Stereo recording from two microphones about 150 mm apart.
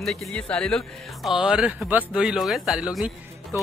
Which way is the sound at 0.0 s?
5° left (ahead or behind).